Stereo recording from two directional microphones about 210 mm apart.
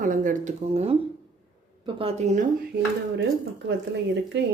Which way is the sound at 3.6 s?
55° right (ahead or behind).